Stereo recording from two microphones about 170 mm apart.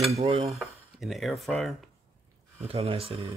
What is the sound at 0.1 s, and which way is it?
Speech, 35° right (ahead or behind).